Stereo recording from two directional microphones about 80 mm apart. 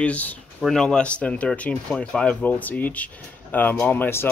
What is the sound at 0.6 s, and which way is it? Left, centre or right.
Speech, centre.